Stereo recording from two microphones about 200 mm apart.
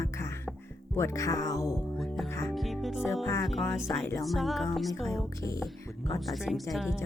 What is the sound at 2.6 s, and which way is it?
Music, centre (ahead or behind).